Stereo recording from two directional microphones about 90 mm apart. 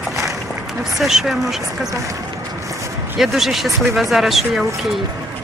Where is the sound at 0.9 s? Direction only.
5° right (ahead or behind).